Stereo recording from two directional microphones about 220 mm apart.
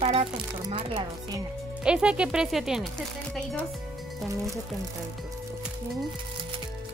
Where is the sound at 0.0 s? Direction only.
30° right (ahead or behind).